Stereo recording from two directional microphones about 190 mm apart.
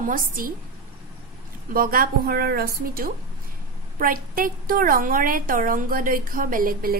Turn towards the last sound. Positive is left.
turn(degrees=-50)  # may be behind; listen again after turning